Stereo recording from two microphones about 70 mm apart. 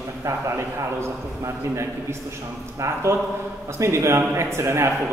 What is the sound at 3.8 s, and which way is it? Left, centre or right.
A man's voice, right.